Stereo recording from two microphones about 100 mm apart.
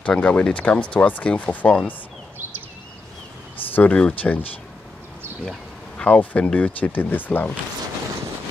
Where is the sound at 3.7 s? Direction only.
15° left (ahead or behind).